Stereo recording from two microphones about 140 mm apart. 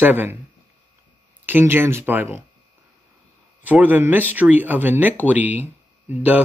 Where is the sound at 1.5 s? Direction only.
15° right (ahead or behind).